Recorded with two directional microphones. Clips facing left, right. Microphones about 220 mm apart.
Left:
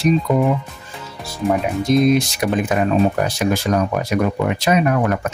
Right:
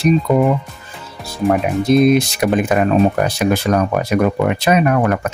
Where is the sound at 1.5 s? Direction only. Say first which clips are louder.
Right 3 dB; 60° right (ahead or behind).